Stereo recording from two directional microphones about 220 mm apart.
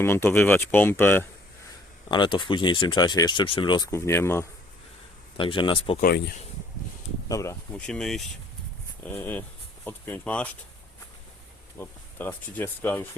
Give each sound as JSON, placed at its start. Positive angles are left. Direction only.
{"t": 0.0, "sound": "speech", "side_deg": 10}
{"t": 2.0, "sound": "speech", "side_deg": 20}
{"t": 5.4, "sound": "speech", "side_deg": 20}
{"t": 6.0, "sound": "speech", "side_deg": 45}
{"t": 7.3, "sound": "speech", "side_deg": 15}
{"t": 7.9, "sound": "speech", "side_deg": 0}
{"t": 11.8, "sound": "speech", "side_deg": 10}